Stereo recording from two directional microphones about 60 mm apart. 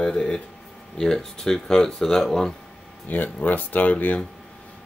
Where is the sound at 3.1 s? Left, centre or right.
Left.